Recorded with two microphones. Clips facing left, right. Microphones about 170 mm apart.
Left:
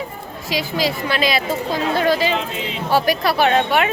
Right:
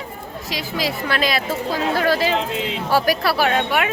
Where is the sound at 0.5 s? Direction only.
Centre (ahead or behind).